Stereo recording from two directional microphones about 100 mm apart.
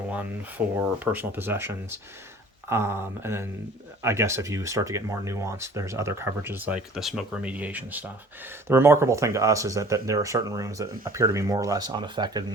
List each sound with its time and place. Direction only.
0.8 s speech: 20° right (ahead or behind)
6.7 s speech: 5° right (ahead or behind); by 12.5 s 45° right (ahead or behind)